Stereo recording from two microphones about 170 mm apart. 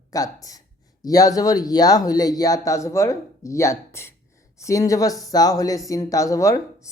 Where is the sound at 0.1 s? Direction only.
20° left (ahead or behind).